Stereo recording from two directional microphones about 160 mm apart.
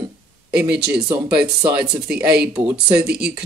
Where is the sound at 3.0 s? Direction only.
80° right.